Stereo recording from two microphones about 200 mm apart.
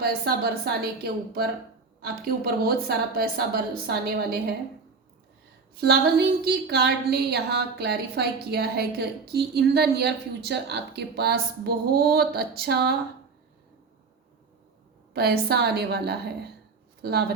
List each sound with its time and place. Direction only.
0.0 s a woman's voice: 50° right (ahead or behind)
5.8 s a woman's voice: 50° right (ahead or behind)
15.1 s a woman's voice: 55° right (ahead or behind)